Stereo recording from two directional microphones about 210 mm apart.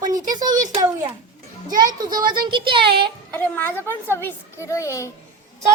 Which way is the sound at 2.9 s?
50° right (ahead or behind).